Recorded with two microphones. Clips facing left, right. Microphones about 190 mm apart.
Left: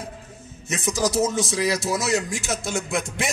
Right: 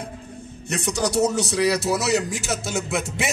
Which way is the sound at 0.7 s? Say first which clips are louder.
Even; centre (ahead or behind).